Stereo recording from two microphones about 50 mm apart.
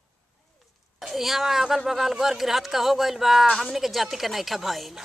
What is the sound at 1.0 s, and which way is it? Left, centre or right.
Speech, centre.